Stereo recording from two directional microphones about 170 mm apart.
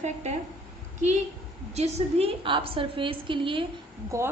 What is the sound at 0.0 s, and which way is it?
Speech, 40° right (ahead or behind).